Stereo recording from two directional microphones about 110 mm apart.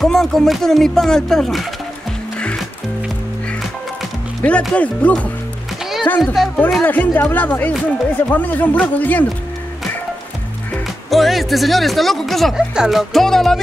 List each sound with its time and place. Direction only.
0.0 s speech: 5° left (ahead or behind)
4.4 s speech: 10° left (ahead or behind)
6.3 s speech: centre (ahead or behind)
6.8 s speech: 15° left (ahead or behind)
11.1 s speech: centre (ahead or behind)